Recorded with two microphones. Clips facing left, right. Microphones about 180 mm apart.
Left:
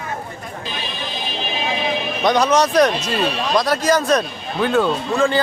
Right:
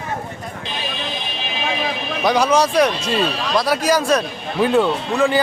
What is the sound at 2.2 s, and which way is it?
A man's voice, 10° right (ahead or behind).